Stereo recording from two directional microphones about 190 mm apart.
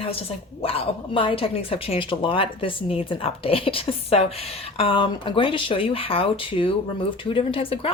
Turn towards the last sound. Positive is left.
turn(degrees=30)  # may be behind; listen again after turning